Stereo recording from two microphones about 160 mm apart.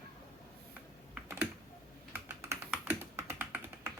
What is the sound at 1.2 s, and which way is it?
Computer keyboard, 15° right (ahead or behind).